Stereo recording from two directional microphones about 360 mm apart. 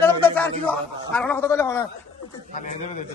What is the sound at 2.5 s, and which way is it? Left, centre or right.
Speech, left.